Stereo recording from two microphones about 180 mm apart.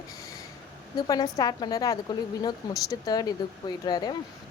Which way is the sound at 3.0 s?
20° left (ahead or behind).